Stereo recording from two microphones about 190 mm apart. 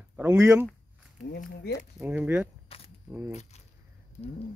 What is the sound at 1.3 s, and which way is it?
Speech, 55° left (ahead or behind).